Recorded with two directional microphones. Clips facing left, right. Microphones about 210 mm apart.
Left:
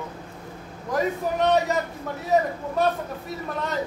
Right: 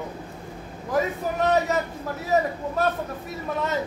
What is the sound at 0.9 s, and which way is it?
A man's voice, centre (ahead or behind).